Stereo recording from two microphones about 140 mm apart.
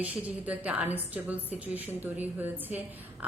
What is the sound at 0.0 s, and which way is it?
A woman's voice, 10° right (ahead or behind).